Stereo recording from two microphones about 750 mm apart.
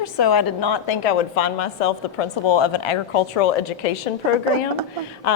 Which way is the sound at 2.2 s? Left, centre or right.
Left.